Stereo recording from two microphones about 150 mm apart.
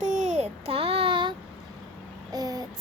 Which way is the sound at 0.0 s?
55° right (ahead or behind).